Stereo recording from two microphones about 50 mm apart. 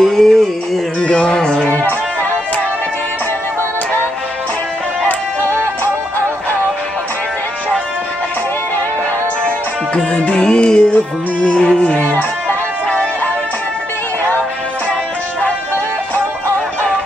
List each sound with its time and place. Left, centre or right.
0.0 s music: centre
1.0 s music: centre
1.7 s music: left
5.0 s music: left
10.1 s music: left